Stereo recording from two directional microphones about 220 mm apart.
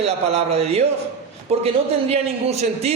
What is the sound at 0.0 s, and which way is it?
A man's voice, 30° right (ahead or behind).